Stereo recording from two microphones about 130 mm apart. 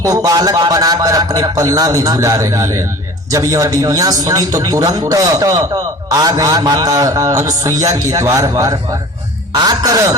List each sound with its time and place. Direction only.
0.0 s speech: 25° right (ahead or behind)